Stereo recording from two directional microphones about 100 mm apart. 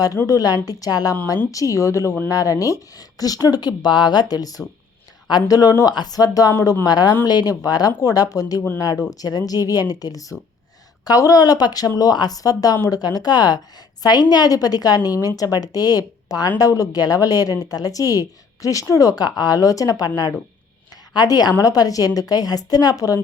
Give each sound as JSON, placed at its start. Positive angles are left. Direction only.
{"t": 0.3, "sound": "a woman's voice", "side_deg": 40}
{"t": 20.9, "sound": "a sound", "side_deg": 40}
{"t": 21.6, "sound": "a woman's voice", "side_deg": 40}